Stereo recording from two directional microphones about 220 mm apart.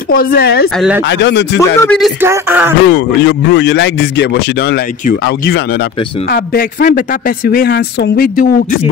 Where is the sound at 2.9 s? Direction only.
50° left (ahead or behind).